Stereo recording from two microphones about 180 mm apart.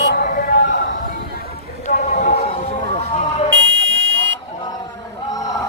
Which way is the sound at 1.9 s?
45° left (ahead or behind).